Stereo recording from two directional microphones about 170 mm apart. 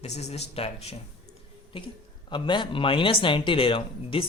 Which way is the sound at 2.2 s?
25° left (ahead or behind).